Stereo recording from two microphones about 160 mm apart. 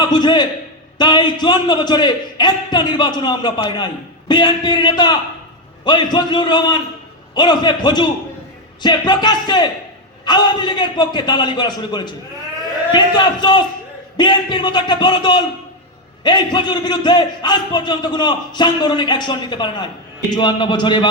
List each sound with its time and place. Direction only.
0.0 s a man's voice: 25° left (ahead or behind)